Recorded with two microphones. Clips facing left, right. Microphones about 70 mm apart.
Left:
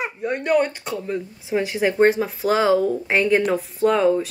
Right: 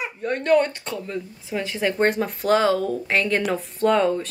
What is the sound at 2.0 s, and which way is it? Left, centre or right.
Speech, centre.